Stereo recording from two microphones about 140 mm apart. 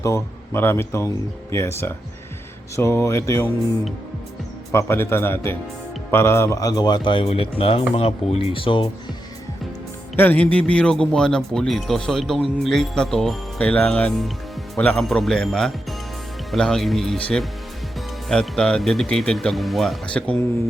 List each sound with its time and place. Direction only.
0.0 s speech: 20° left (ahead or behind)
4.7 s a man's voice: 20° left (ahead or behind); by 8.9 s 40° left (ahead or behind)
10.2 s speech: 10° left (ahead or behind)